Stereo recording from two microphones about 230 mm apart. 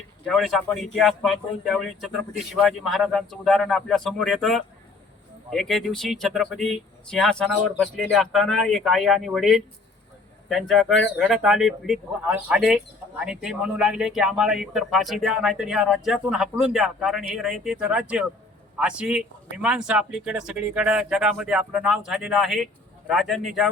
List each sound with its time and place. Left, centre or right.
0.3 s speech: centre